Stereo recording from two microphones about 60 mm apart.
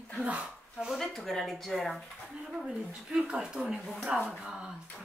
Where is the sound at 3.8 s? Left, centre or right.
Centre.